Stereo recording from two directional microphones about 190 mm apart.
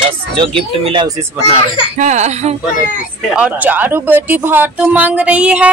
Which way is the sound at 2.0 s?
40° right (ahead or behind).